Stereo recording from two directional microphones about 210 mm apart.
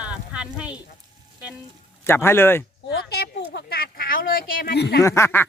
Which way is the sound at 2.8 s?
50° left (ahead or behind).